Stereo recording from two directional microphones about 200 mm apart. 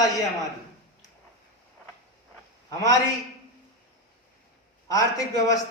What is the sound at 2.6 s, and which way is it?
Speech, 20° left (ahead or behind).